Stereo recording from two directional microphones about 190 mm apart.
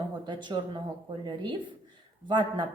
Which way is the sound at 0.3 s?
25° right (ahead or behind).